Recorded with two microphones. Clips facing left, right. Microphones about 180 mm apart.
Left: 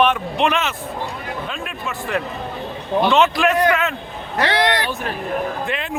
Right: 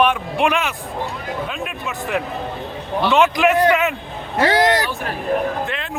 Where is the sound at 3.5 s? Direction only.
30° right (ahead or behind).